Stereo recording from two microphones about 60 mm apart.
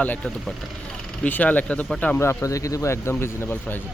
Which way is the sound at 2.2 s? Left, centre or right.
Left.